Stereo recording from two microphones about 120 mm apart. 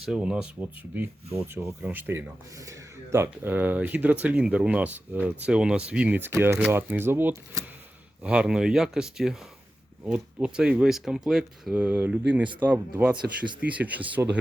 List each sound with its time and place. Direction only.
0.1 s speech: 10° right (ahead or behind)